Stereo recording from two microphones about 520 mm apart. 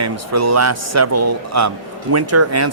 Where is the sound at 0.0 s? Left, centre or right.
Right.